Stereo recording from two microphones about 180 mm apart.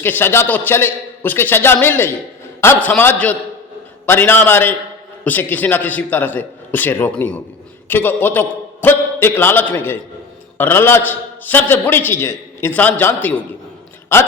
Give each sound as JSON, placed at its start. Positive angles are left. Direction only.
{"t": 0.0, "sound": "a man's voice", "side_deg": 10}